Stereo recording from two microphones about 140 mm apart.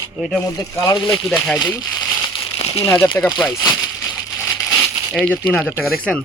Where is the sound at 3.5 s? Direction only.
30° left (ahead or behind).